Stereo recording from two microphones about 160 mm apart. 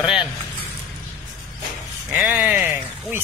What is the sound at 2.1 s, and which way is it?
Speech, 5° right (ahead or behind).